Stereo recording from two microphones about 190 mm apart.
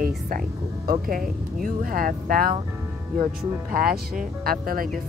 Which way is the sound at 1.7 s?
50° right (ahead or behind).